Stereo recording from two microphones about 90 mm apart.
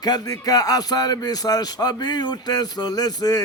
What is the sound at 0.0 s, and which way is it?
Speech, 45° left (ahead or behind).